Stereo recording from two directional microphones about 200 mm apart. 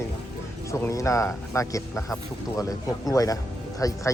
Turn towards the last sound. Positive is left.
turn(degrees=15)  # may be behind; listen again after turning